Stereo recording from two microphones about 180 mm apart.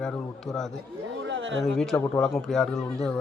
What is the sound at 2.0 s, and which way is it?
Speech, 15° left (ahead or behind).